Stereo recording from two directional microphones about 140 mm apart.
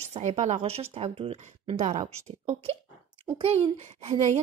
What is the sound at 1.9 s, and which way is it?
Speech, 60° right (ahead or behind).